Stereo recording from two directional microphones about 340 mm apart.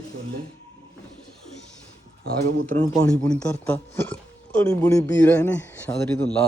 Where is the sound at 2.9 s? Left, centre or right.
Centre.